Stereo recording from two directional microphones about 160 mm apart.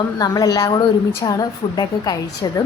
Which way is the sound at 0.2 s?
25° left (ahead or behind).